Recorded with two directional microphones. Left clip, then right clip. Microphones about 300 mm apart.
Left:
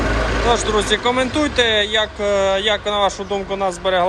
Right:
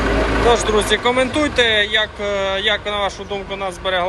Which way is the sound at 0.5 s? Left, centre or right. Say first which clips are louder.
Right 1 dB; centre.